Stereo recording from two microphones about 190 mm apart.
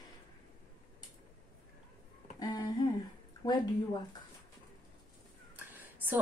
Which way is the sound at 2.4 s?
20° left (ahead or behind).